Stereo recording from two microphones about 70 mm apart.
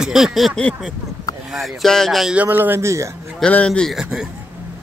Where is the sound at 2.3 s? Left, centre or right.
Right.